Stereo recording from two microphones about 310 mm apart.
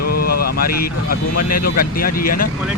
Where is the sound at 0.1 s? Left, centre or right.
Left.